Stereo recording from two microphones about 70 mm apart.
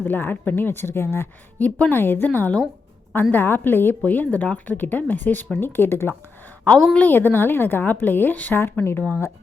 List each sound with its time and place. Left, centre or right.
0.0 s speech: left
1.5 s speech: left